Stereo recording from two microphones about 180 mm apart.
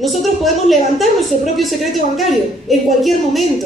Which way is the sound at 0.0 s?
Centre (ahead or behind).